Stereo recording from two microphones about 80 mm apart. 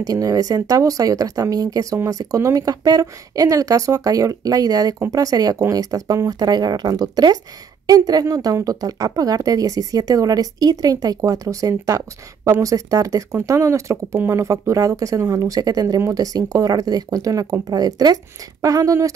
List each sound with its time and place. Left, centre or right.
0.0 s a woman's voice: right
16.0 s a woman's voice: right